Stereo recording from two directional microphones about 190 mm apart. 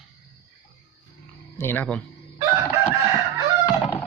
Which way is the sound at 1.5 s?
10° left (ahead or behind).